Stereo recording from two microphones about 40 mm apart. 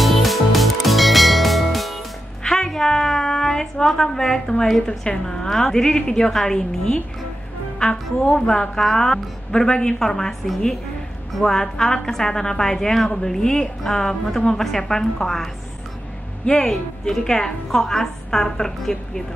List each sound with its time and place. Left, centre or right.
0.0 s music: centre
2.4 s music: centre
3.1 s a woman's voice: centre